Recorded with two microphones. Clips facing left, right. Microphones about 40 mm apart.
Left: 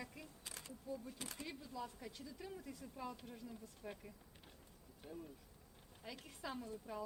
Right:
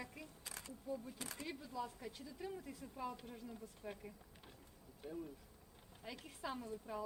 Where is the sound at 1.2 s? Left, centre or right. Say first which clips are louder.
Right 1 dB; right.